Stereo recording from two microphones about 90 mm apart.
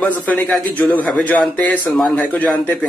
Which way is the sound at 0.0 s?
20° left (ahead or behind).